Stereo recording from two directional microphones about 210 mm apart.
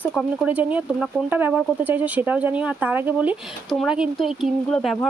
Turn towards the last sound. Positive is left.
turn(degrees=0)  # may be behind; listen again after turning